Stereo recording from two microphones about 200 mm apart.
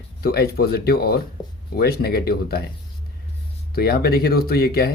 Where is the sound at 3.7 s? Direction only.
50° left (ahead or behind).